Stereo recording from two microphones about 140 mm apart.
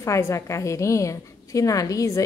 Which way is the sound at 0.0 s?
20° left (ahead or behind).